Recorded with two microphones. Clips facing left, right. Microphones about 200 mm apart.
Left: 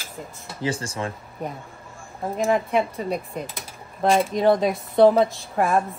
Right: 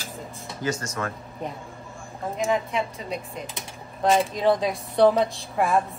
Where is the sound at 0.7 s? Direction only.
30° left (ahead or behind).